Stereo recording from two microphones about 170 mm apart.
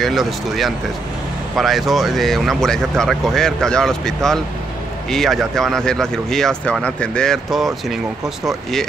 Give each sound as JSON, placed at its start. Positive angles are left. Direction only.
{"t": 0.0, "sound": "speech", "side_deg": 0}